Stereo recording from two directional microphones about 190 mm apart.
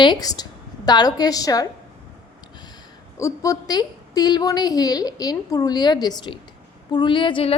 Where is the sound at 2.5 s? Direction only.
20° left (ahead or behind).